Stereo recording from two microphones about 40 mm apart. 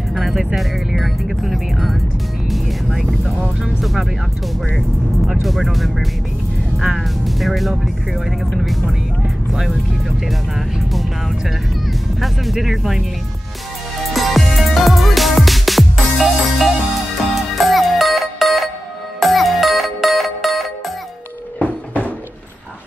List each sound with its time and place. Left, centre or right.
0.1 s music: centre
0.6 s speech: centre
3.3 s speech: centre
4.7 s speech: centre
9.5 s speech: centre
12.6 s speech: centre
14.1 s music: centre
21.6 s a sound: left